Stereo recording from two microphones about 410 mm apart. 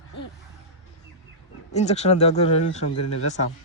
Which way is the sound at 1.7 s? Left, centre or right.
Centre.